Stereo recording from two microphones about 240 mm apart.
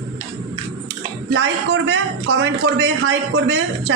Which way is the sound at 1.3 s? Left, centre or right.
Right.